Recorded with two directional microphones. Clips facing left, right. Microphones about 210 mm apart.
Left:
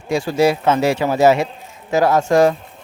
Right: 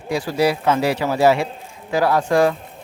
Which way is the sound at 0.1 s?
25° left (ahead or behind).